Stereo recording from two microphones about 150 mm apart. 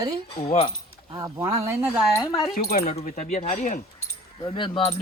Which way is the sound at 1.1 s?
25° right (ahead or behind).